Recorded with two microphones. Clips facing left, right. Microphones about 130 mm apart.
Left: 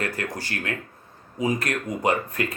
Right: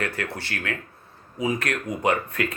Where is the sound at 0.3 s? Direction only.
35° left (ahead or behind).